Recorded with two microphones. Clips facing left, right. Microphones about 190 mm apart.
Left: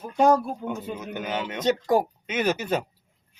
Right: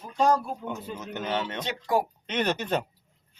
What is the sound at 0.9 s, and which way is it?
Speech, 10° left (ahead or behind).